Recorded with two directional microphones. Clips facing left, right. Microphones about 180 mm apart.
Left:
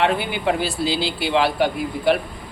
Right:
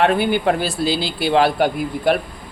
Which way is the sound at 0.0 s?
45° right (ahead or behind).